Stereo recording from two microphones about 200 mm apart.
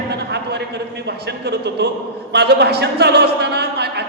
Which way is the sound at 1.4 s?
55° right (ahead or behind).